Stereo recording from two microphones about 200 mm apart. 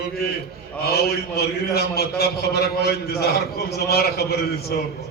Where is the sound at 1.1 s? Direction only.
50° left (ahead or behind).